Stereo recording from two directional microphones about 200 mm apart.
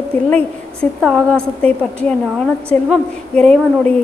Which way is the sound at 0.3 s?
5° left (ahead or behind).